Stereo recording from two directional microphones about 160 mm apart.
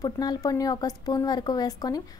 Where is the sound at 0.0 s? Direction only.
25° left (ahead or behind).